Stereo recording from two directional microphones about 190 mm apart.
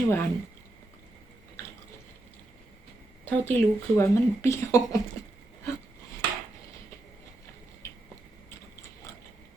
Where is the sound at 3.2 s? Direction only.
10° left (ahead or behind).